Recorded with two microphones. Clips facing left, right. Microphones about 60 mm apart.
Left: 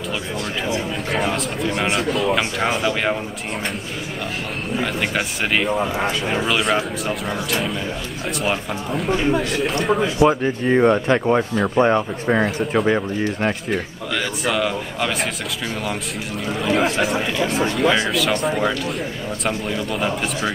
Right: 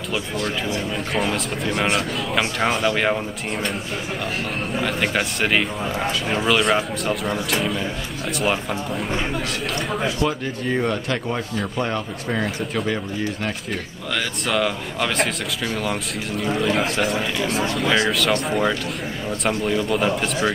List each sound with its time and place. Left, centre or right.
1.1 s a man's voice: centre
4.7 s a man's voice: centre
10.1 s speech: left
14.1 s a man's voice: centre
16.4 s a man's voice: centre